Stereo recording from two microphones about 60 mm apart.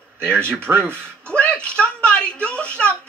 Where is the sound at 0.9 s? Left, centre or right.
Left.